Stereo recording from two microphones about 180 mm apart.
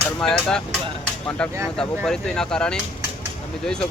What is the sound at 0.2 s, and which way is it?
Speech, 5° left (ahead or behind).